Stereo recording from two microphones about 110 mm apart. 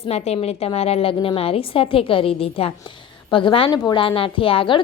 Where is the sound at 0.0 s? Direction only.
75° left (ahead or behind).